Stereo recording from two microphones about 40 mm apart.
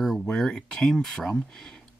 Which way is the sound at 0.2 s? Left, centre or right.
Centre.